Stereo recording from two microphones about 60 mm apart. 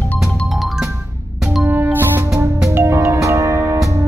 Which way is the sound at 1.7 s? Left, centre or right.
Right.